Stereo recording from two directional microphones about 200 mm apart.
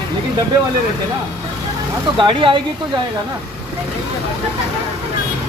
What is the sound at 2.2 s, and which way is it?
Speech, 25° right (ahead or behind).